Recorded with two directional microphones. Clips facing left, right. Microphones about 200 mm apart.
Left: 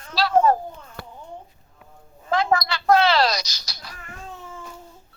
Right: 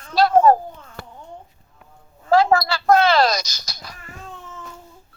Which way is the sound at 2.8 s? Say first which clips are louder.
Right 1 dB; 50° right (ahead or behind).